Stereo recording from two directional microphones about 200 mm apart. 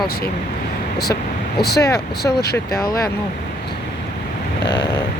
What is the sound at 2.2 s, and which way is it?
Speech, 55° left (ahead or behind).